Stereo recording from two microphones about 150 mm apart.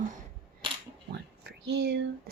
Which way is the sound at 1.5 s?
90° right.